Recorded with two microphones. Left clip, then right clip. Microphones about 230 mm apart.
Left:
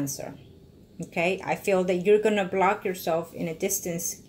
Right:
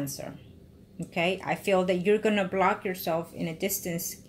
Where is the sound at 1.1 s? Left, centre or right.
Right.